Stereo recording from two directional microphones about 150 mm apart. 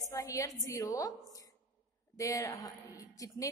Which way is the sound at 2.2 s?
20° left (ahead or behind).